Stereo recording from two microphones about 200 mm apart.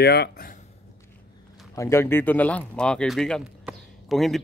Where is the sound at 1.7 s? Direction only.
15° left (ahead or behind).